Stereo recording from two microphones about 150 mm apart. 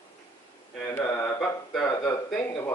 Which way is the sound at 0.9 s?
15° left (ahead or behind).